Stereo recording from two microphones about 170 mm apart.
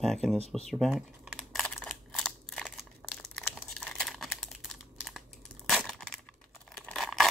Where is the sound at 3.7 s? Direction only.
5° left (ahead or behind).